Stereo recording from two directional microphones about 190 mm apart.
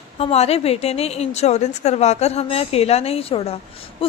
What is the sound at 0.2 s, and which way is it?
A woman's voice, 35° left (ahead or behind).